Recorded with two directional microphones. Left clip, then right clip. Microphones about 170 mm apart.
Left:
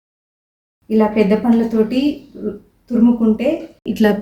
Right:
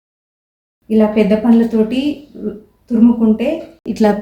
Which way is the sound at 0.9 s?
20° left (ahead or behind).